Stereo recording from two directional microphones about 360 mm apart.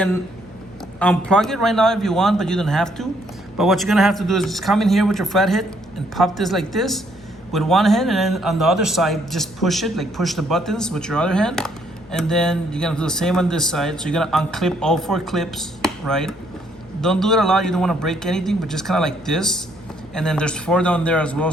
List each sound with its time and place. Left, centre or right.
0.9 s a man's voice: centre